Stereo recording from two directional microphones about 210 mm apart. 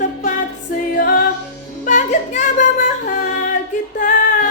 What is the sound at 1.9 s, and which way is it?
Child singing, 35° left (ahead or behind).